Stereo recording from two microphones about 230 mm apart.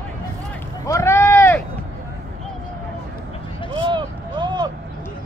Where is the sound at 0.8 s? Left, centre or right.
Centre.